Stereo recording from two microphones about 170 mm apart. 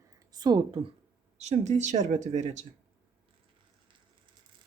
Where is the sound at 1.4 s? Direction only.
40° right (ahead or behind).